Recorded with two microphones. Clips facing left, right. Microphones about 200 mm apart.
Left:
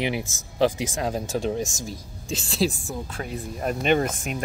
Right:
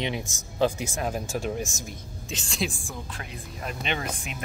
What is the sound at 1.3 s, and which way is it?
Speech, 35° left (ahead or behind).